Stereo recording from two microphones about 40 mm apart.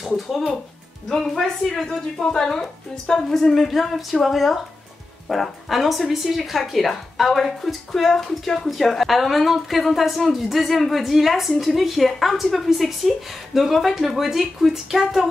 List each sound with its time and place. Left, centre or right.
0.0 s music: centre
1.0 s speech: centre